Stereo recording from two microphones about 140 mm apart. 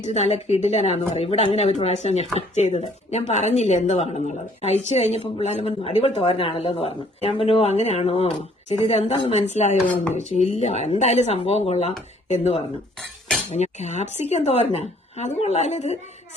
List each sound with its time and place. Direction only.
0.0 s speech: 50° left (ahead or behind)